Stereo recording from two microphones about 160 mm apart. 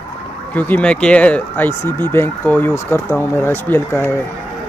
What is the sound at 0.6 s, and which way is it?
Speech, 10° left (ahead or behind).